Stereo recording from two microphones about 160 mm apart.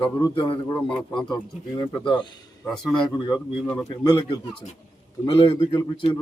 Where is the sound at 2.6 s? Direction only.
5° left (ahead or behind).